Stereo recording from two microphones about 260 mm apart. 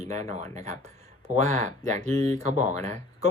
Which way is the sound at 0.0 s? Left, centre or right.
Right.